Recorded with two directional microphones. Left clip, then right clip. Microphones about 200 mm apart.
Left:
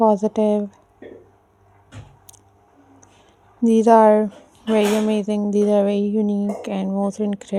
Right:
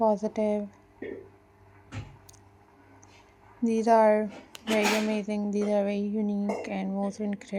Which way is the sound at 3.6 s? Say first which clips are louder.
Left 9 dB; 55° left (ahead or behind).